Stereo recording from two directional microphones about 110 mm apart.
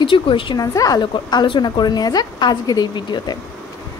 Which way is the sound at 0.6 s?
35° left (ahead or behind).